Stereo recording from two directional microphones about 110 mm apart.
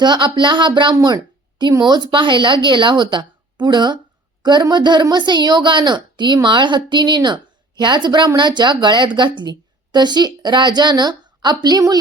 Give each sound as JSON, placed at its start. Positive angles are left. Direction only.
{"t": 0.0, "sound": "speech", "side_deg": -45}
{"t": 1.0, "sound": "a sound", "side_deg": -40}
{"t": 1.8, "sound": "a woman's voice", "side_deg": -40}